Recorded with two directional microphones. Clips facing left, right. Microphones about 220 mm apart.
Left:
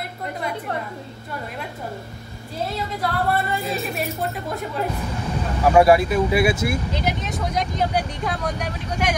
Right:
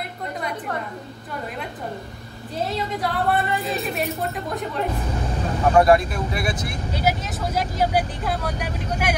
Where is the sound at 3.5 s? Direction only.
Centre (ahead or behind).